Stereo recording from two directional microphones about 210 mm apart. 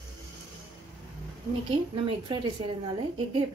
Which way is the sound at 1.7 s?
25° right (ahead or behind).